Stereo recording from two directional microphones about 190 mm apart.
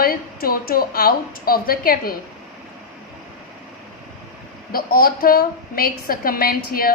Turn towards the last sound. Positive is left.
turn(degrees=50)  # may be behind; listen again after turning